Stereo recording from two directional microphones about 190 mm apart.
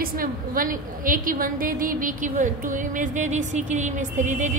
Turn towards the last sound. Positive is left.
turn(degrees=-40)  # may be behind; listen again after turning